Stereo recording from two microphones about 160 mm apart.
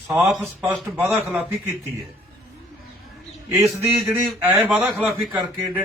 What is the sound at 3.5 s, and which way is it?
A man's voice, 15° right (ahead or behind).